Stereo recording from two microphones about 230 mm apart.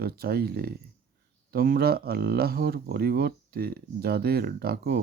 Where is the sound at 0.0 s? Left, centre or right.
Right.